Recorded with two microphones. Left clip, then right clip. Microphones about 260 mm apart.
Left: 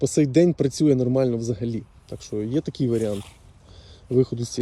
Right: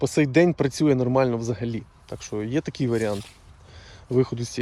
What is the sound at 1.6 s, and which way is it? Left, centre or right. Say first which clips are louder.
Speech: left 1 dB; centre.